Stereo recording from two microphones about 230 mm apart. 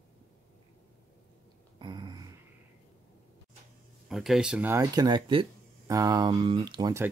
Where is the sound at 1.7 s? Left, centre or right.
Centre.